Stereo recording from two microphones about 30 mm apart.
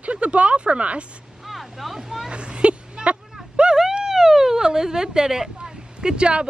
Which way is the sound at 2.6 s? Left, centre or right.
Right.